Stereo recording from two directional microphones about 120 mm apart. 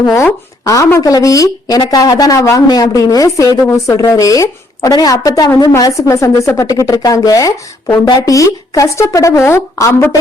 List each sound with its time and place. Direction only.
0.0 s a woman's voice: 25° left (ahead or behind)